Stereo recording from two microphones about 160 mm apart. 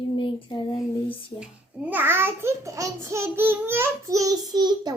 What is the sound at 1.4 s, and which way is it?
A child's voice, 10° right (ahead or behind).